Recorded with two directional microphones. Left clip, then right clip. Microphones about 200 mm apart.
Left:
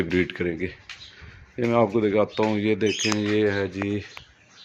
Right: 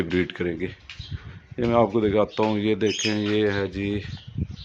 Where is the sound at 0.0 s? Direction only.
Centre (ahead or behind).